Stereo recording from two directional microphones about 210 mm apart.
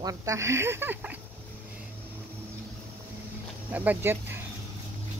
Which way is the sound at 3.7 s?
10° right (ahead or behind).